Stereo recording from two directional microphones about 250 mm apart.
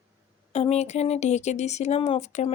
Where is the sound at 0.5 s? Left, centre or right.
Left.